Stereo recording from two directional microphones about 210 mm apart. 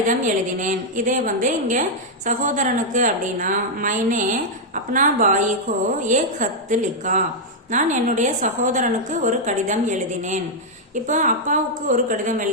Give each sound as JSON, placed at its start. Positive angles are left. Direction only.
{"t": 0.6, "sound": "a woman's voice", "side_deg": -40}